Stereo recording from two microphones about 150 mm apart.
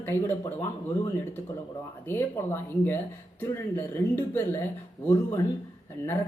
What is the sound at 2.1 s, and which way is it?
A woman's voice, 15° left (ahead or behind).